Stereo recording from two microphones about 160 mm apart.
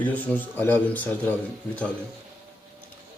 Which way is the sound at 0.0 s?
10° left (ahead or behind).